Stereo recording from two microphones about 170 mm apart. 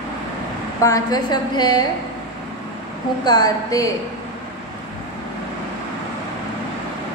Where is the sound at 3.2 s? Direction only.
20° left (ahead or behind).